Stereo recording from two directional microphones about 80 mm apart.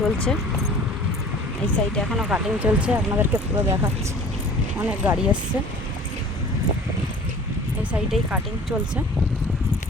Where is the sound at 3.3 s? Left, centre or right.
Right.